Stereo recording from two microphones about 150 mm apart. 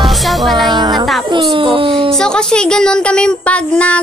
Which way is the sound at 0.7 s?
30° right (ahead or behind).